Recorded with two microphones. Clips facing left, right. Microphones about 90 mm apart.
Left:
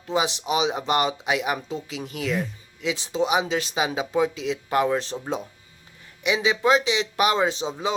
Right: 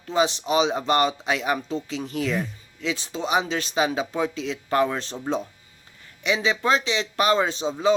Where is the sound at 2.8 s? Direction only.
15° left (ahead or behind).